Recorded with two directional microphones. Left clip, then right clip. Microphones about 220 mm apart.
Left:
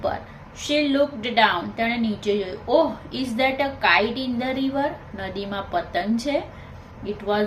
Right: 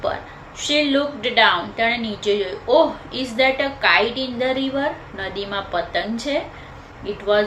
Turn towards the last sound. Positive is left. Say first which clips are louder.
# right 3 dB
turn(degrees=20)  # may be behind; listen again after turning